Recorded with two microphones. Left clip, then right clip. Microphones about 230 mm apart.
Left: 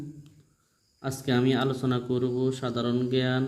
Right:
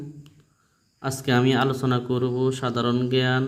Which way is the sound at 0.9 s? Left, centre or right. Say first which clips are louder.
Right 5 dB; centre.